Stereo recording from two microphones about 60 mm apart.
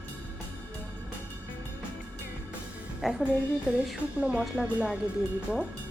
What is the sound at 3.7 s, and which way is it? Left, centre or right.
Speech, centre.